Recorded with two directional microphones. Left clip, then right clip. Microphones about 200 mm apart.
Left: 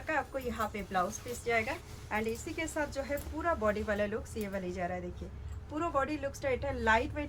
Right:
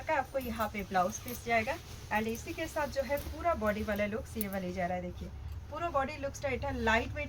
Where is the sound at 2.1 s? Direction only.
30° left (ahead or behind).